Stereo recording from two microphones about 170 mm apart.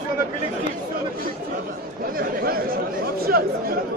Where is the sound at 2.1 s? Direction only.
60° right (ahead or behind).